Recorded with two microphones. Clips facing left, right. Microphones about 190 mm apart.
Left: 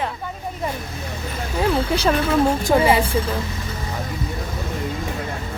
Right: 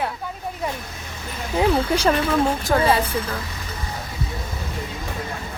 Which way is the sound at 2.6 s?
15° left (ahead or behind).